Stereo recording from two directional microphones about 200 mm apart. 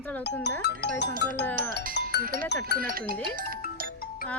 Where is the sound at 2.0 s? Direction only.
60° left (ahead or behind).